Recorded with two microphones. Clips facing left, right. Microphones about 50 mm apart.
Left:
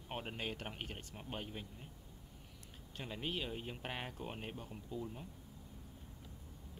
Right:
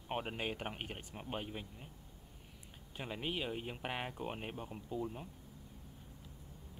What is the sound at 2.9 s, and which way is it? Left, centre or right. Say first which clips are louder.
Speech: right 2 dB; centre.